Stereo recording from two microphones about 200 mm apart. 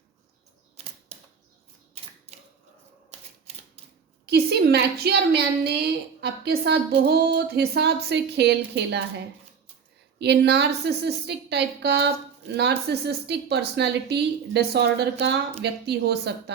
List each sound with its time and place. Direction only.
4.3 s a woman's voice: 55° right (ahead or behind)
10.2 s a woman's voice: 55° right (ahead or behind)